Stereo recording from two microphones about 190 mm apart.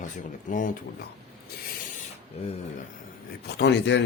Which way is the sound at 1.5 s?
55° left (ahead or behind).